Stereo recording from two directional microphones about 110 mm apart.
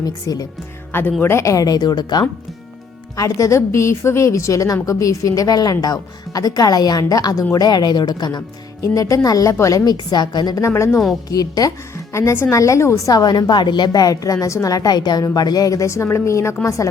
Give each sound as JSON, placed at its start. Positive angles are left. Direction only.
{"t": 0.0, "sound": "a woman's voice", "side_deg": 35}
{"t": 12.1, "sound": "a woman's voice", "side_deg": 25}
{"t": 13.1, "sound": "a woman's voice", "side_deg": 40}